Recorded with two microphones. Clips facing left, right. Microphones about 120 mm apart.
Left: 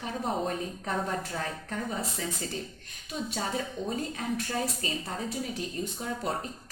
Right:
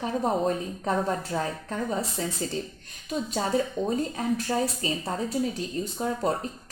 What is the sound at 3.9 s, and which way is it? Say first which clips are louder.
A woman's voice: right 4 dB; 35° right (ahead or behind).